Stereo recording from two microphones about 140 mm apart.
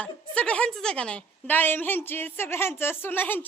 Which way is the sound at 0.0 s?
10° left (ahead or behind).